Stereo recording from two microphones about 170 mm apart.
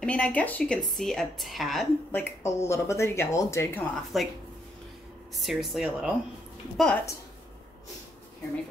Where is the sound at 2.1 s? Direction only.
15° left (ahead or behind).